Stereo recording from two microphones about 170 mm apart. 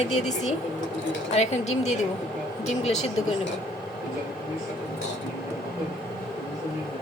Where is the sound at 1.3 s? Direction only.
40° left (ahead or behind).